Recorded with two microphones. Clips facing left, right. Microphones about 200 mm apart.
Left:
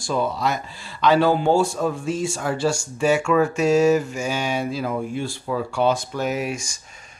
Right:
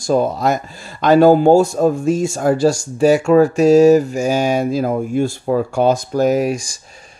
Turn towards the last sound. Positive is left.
turn(degrees=-35)  # may be behind; listen again after turning